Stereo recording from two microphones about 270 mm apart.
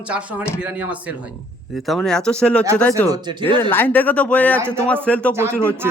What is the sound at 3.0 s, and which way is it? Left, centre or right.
Speech, centre.